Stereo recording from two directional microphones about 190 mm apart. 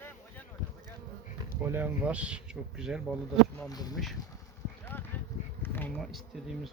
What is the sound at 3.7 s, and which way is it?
Speech, 20° left (ahead or behind).